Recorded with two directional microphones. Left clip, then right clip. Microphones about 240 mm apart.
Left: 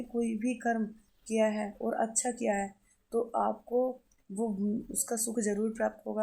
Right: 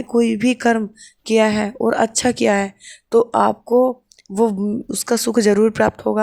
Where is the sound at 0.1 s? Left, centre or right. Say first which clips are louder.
Right 17 dB; right.